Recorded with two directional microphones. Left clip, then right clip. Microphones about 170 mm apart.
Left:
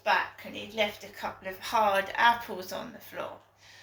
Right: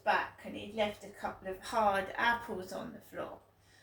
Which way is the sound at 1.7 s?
15° right (ahead or behind).